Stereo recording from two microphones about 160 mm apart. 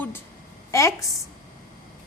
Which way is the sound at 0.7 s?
20° left (ahead or behind).